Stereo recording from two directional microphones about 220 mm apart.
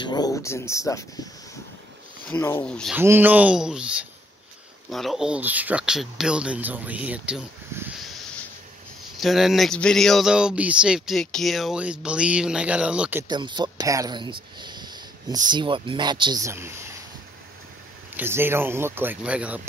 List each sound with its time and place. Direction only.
0.0 s speech: 20° left (ahead or behind)
2.2 s speech: 10° left (ahead or behind)
3.0 s speech: 10° right (ahead or behind)
9.2 s speech: centre (ahead or behind)
13.3 s speech: 20° right (ahead or behind)
18.1 s speech: 10° right (ahead or behind)